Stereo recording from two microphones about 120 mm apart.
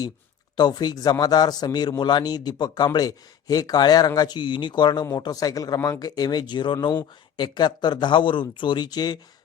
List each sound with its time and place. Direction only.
0.5 s a man's voice: 35° left (ahead or behind)